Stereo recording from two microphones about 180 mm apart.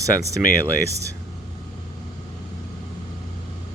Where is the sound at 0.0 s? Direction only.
15° right (ahead or behind).